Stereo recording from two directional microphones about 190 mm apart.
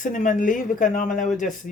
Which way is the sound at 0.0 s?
45° left (ahead or behind).